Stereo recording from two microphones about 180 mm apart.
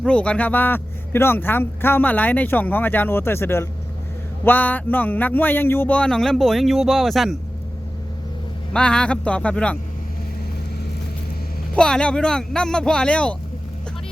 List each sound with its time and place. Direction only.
0.0 s speech: 5° left (ahead or behind)
8.7 s speech: 5° left (ahead or behind)
11.7 s speech: 5° left (ahead or behind)